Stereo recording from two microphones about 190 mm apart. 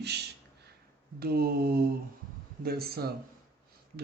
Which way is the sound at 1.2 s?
55° right (ahead or behind).